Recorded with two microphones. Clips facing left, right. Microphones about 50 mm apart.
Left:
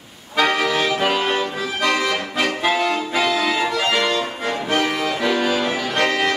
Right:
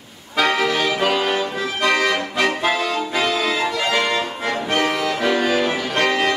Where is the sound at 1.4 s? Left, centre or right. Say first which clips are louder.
Right 1 dB; centre.